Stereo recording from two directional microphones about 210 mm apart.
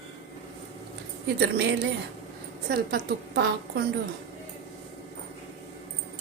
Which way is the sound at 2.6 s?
45° right (ahead or behind).